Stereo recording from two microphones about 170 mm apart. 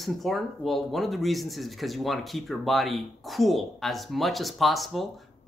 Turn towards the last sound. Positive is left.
turn(degrees=0)  # may be behind; listen again after turning